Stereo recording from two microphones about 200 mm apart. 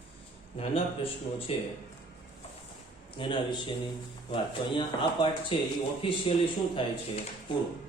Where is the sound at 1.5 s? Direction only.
30° left (ahead or behind).